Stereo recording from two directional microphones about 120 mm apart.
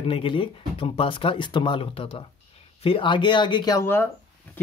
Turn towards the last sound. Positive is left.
turn(degrees=20)  # may be behind; listen again after turning